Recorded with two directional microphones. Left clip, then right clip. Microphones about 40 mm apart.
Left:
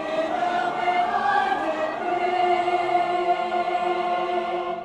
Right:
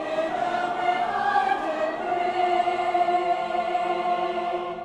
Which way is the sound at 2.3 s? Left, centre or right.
Right.